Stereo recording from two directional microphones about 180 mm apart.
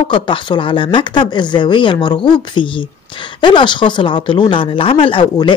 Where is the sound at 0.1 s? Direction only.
30° left (ahead or behind).